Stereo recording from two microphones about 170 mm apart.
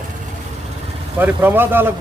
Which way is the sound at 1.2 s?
10° right (ahead or behind).